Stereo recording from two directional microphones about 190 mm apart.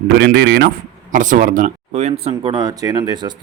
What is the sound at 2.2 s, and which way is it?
Speech, 25° right (ahead or behind).